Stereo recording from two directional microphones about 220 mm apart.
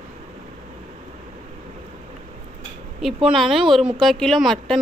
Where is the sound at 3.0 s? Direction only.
Centre (ahead or behind).